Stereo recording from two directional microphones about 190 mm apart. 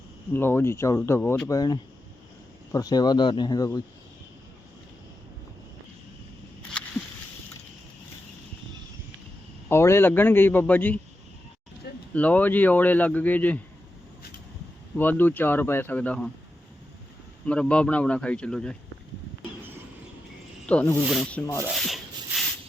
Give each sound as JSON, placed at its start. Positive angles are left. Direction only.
{"t": 0.3, "sound": "speech", "side_deg": 10}
{"t": 6.8, "sound": "a sound", "side_deg": 5}
{"t": 9.6, "sound": "speech", "side_deg": 15}
{"t": 12.1, "sound": "speech", "side_deg": 5}
{"t": 14.9, "sound": "speech", "side_deg": 10}
{"t": 17.4, "sound": "speech", "side_deg": 5}
{"t": 20.7, "sound": "speech", "side_deg": 5}
{"t": 21.4, "sound": "speech", "side_deg": 15}
{"t": 21.7, "sound": "rub", "side_deg": 0}